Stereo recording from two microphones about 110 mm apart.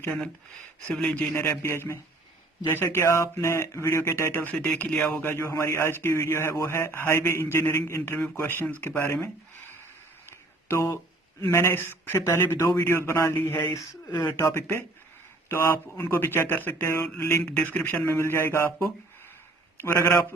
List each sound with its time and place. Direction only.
0.0 s speech: 15° left (ahead or behind)
1.3 s speech: 20° left (ahead or behind)
10.7 s speech: 25° left (ahead or behind)
17.4 s speech: 15° left (ahead or behind)
19.7 s speech: 20° left (ahead or behind)